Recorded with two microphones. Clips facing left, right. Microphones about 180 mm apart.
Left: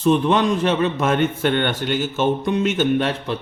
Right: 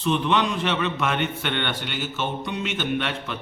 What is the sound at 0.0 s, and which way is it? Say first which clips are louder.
A man's voice: left 6 dB; 40° left (ahead or behind).